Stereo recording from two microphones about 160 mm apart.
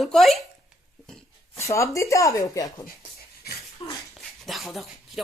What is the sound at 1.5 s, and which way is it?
Speech, 20° left (ahead or behind).